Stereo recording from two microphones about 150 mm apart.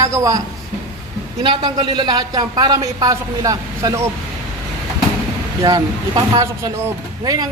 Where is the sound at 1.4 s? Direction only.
30° right (ahead or behind).